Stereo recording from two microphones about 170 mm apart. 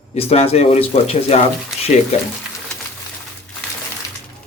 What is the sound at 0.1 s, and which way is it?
Speech, 35° left (ahead or behind).